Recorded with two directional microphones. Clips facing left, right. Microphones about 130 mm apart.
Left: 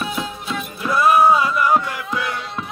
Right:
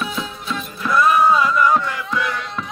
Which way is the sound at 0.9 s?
25° left (ahead or behind).